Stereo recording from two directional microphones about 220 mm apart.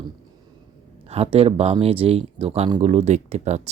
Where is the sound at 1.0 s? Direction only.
25° right (ahead or behind).